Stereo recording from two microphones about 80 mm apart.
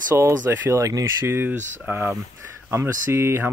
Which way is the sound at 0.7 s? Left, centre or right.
Right.